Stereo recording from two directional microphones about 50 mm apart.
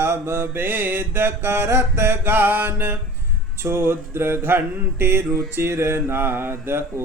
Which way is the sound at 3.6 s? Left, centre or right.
Right.